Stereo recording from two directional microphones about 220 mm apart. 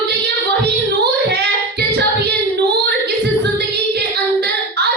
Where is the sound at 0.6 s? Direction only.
50° right (ahead or behind).